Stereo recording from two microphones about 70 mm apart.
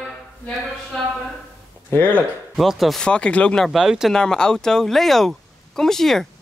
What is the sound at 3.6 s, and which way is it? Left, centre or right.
Speech, centre.